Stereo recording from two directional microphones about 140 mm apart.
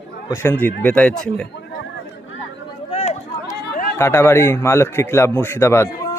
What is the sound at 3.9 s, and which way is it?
A man's voice, 20° left (ahead or behind).